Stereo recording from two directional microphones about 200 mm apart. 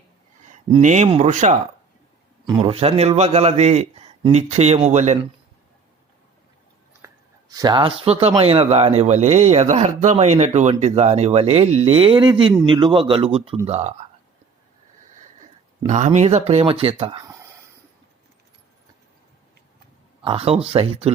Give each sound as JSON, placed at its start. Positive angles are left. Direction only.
{"t": 0.4, "sound": "speech", "side_deg": -40}
{"t": 2.6, "sound": "a man's voice", "side_deg": -30}
{"t": 7.0, "sound": "a sound", "side_deg": -20}
{"t": 8.4, "sound": "a man's voice", "side_deg": -30}
{"t": 15.9, "sound": "a man's voice", "side_deg": -35}
{"t": 20.2, "sound": "speech", "side_deg": -30}